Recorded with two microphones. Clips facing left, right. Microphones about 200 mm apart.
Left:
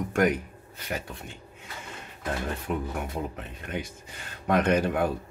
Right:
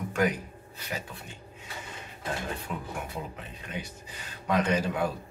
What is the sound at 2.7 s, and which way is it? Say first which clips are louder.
Speech: left 5 dB; 55° left (ahead or behind).